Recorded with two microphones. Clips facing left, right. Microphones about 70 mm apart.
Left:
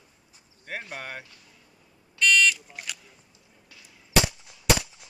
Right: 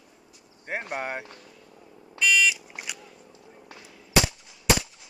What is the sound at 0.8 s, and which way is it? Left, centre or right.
Speech, right.